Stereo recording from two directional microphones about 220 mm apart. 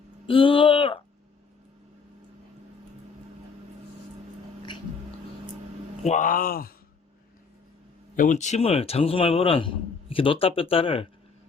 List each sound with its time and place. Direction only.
0.3 s speech: 25° left (ahead or behind)
6.0 s speech: 30° left (ahead or behind)
8.1 s a man's voice: 35° left (ahead or behind)